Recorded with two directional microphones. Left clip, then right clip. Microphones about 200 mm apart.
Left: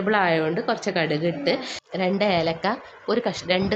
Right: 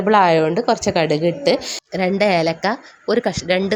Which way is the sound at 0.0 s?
35° right (ahead or behind).